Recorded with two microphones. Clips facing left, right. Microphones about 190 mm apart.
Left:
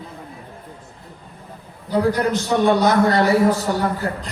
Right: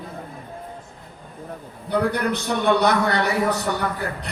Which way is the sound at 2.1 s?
65° right (ahead or behind).